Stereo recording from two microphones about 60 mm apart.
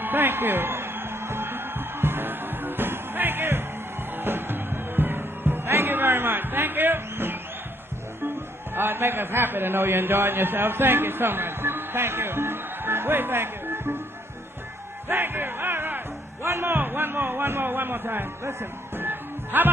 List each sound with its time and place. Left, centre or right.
0.0 s music: right
8.7 s a man's voice: right
15.0 s music: right
16.4 s a sound: right
18.9 s music: right